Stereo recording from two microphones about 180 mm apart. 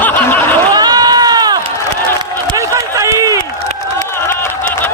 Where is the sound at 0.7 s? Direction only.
20° right (ahead or behind).